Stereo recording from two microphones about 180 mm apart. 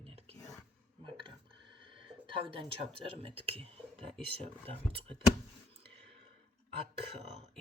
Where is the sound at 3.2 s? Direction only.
30° right (ahead or behind).